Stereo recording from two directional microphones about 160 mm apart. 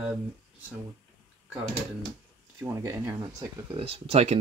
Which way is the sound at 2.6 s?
20° right (ahead or behind).